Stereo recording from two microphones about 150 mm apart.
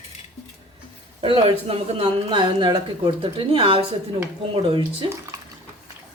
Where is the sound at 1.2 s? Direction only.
40° right (ahead or behind).